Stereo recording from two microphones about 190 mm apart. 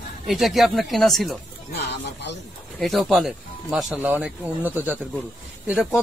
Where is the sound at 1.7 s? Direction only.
65° left (ahead or behind).